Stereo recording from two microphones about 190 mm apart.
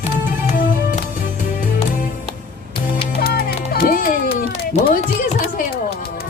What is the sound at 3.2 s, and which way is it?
Music, 55° left (ahead or behind).